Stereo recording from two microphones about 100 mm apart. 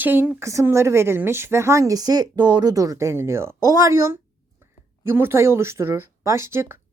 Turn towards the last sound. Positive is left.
turn(degrees=-25)  # may be behind; listen again after turning